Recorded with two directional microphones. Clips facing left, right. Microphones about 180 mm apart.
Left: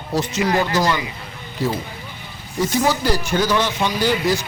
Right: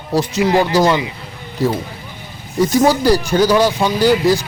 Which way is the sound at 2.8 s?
40° right (ahead or behind).